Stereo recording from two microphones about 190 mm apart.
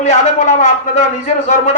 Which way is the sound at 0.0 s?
35° left (ahead or behind).